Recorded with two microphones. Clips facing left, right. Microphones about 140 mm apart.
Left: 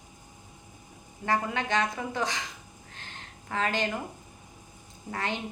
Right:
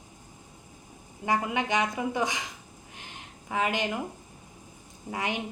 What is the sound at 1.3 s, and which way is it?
A woman's voice, 15° right (ahead or behind).